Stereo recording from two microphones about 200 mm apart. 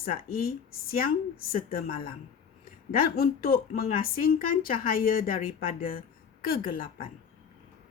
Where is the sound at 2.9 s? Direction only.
45° left (ahead or behind).